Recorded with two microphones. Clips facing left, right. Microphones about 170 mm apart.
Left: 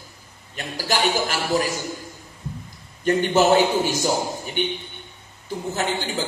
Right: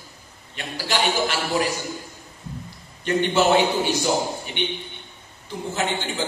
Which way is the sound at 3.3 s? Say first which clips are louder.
Left 2 dB; 45° left (ahead or behind).